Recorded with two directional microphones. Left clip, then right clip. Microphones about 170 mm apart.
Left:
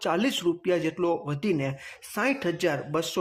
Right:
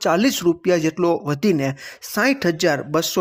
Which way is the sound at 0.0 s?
25° right (ahead or behind).